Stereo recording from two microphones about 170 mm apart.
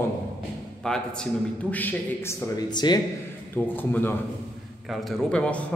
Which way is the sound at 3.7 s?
10° left (ahead or behind).